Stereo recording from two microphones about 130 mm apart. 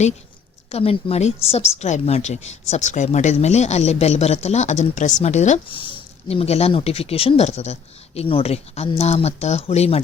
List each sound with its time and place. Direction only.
0.7 s a woman's voice: 50° left (ahead or behind); by 5.5 s 65° left (ahead or behind)
5.6 s speech: 40° left (ahead or behind)